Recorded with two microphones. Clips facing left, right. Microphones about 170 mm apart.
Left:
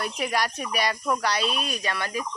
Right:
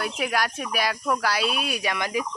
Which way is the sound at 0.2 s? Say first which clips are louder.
Even; centre (ahead or behind).